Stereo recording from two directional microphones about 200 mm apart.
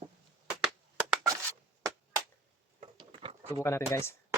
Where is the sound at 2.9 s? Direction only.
25° right (ahead or behind).